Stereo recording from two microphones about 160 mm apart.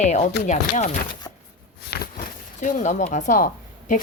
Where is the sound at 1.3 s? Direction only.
20° left (ahead or behind).